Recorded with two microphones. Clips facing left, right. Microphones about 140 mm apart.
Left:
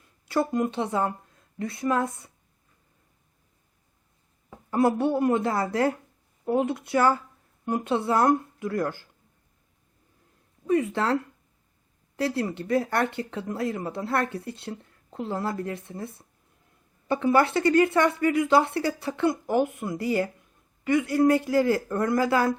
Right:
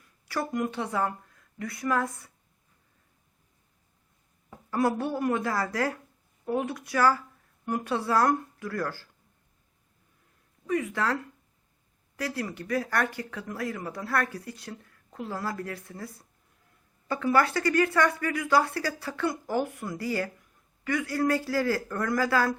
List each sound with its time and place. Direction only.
0.0 s speech: 25° left (ahead or behind)
4.4 s speech: 20° left (ahead or behind)
10.7 s speech: 30° left (ahead or behind)